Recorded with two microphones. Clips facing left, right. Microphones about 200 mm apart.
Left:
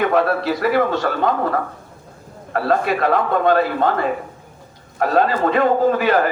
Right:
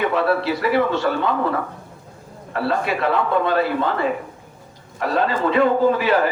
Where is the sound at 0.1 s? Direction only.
45° left (ahead or behind).